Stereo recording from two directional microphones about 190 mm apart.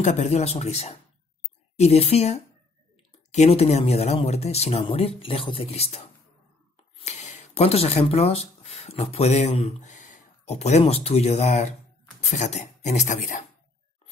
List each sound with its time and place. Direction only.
0.0 s speech: 35° left (ahead or behind)